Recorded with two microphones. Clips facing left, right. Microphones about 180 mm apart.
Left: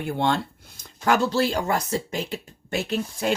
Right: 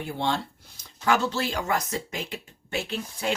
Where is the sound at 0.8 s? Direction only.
45° left (ahead or behind).